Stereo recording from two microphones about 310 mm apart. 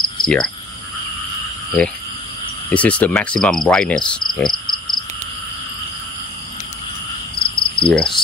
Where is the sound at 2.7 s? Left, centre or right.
Centre.